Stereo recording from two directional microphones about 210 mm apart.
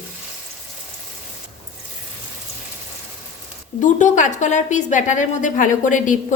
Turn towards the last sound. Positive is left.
turn(degrees=40)  # may be behind; listen again after turning